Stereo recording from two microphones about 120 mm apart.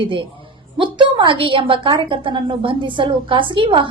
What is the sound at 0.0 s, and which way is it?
A woman's voice, 45° right (ahead or behind).